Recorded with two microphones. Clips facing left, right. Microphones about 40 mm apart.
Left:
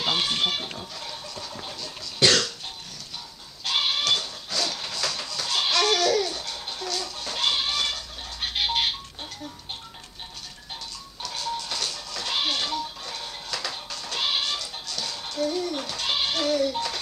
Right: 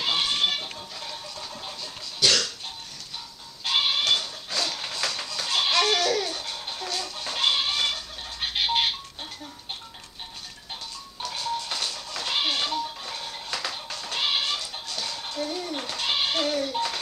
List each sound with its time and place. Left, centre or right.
0.0 s a sound: centre
2.1 s cough: left
3.6 s goat: centre
5.0 s music: centre
11.1 s music: centre
14.1 s music: centre
15.0 s a sound: centre